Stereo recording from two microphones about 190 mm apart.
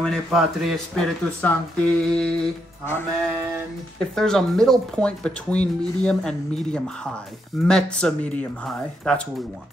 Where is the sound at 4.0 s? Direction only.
5° left (ahead or behind).